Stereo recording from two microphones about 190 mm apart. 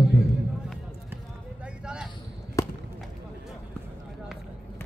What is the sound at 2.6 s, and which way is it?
Basketball bounce, 15° left (ahead or behind).